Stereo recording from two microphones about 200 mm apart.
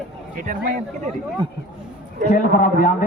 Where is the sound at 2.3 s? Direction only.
40° left (ahead or behind).